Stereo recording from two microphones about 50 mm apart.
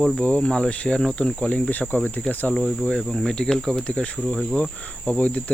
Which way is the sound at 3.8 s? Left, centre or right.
Left.